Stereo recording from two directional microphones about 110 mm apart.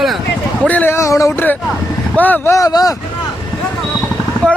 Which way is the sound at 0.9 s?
30° left (ahead or behind).